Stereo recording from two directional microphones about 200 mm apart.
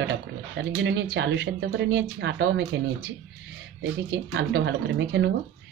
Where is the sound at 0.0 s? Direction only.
60° right (ahead or behind).